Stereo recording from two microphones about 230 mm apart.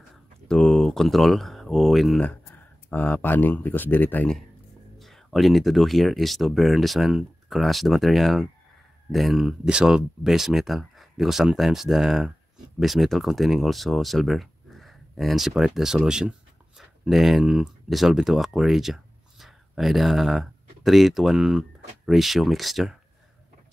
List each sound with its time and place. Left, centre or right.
0.5 s speech: centre